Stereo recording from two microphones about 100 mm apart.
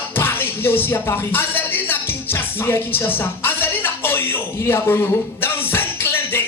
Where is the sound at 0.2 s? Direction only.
20° left (ahead or behind).